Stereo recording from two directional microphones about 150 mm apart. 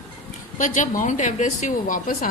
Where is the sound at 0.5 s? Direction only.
60° left (ahead or behind).